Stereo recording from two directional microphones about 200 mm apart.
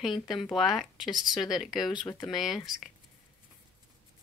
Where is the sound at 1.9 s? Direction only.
20° left (ahead or behind).